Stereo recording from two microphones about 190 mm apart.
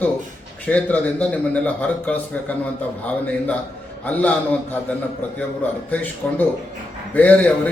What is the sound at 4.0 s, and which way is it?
Speech, 10° left (ahead or behind).